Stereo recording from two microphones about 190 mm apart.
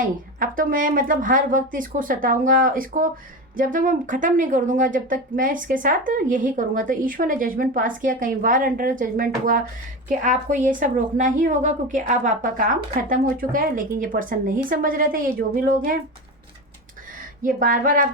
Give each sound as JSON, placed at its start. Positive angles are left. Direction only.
{"t": 0.0, "sound": "speech", "side_deg": -45}
{"t": 17.4, "sound": "speech", "side_deg": -45}